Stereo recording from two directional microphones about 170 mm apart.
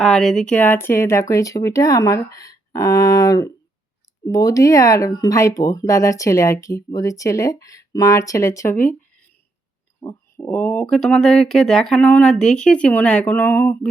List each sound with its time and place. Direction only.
0.0 s speech: centre (ahead or behind)
10.0 s speech: 15° left (ahead or behind)